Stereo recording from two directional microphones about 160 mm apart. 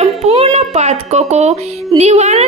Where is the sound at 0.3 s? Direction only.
40° right (ahead or behind).